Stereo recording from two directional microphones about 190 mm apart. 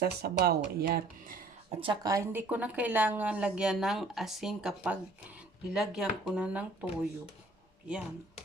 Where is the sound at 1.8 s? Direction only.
20° right (ahead or behind).